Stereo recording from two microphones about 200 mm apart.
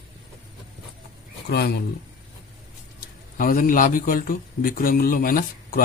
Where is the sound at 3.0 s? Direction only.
45° left (ahead or behind).